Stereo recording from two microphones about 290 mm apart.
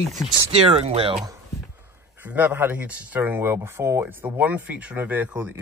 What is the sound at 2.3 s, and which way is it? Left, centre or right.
Speech, centre.